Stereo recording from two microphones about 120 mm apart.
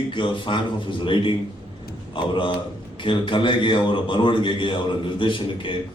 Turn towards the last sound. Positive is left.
turn(degrees=45)  # may be behind; listen again after turning